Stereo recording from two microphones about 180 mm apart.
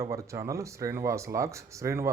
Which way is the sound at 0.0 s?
15° right (ahead or behind).